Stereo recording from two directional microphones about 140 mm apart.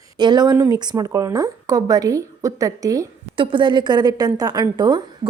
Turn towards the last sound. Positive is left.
turn(degrees=-30)  # may be behind; listen again after turning